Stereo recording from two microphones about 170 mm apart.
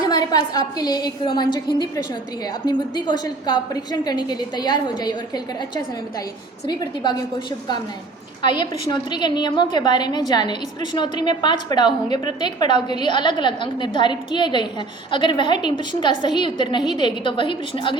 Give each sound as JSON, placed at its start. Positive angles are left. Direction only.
{"t": 0.0, "sound": "a woman's voice", "side_deg": 25}
{"t": 2.6, "sound": "a woman's voice", "side_deg": 25}
{"t": 8.4, "sound": "a woman's voice", "side_deg": 25}